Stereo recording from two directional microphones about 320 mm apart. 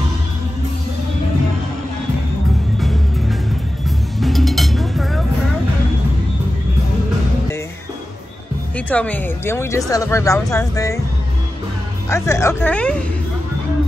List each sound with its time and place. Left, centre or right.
2.8 s music: centre
8.7 s speech: centre
12.1 s speech: centre